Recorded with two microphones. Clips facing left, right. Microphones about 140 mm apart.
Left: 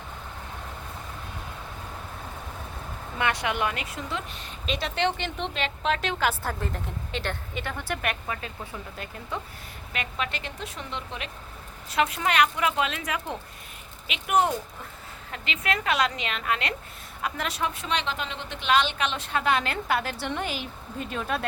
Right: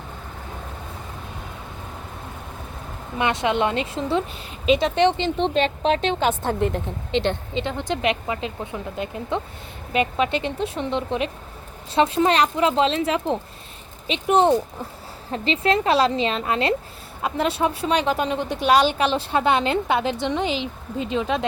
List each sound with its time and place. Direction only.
3.2 s speech: 20° right (ahead or behind)
5.5 s a woman's voice: 35° right (ahead or behind); by 21.4 s 15° right (ahead or behind)